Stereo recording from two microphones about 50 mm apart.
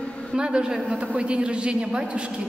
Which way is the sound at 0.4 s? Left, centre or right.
Centre.